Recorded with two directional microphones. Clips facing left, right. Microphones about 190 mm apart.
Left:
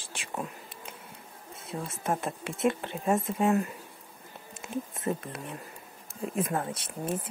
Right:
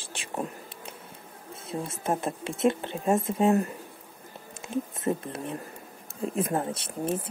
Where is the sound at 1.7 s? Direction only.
25° right (ahead or behind).